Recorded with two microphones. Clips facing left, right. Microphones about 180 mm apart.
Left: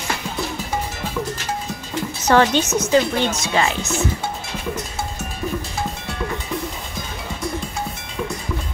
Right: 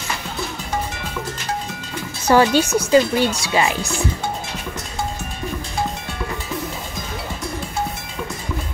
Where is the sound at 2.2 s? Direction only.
10° right (ahead or behind).